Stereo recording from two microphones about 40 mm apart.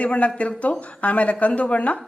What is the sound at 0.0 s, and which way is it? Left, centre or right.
Speech, left.